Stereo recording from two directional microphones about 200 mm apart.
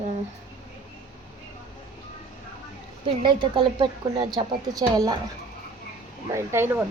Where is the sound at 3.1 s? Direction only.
25° right (ahead or behind).